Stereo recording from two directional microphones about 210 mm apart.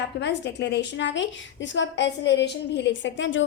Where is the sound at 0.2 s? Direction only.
55° left (ahead or behind).